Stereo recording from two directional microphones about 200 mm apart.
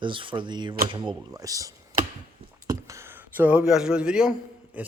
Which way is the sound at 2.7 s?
15° right (ahead or behind).